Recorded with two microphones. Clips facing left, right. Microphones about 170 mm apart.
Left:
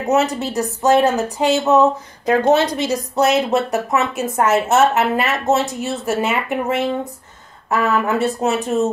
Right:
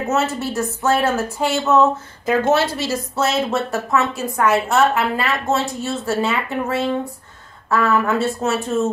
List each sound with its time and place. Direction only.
0.1 s a woman's voice: 15° left (ahead or behind)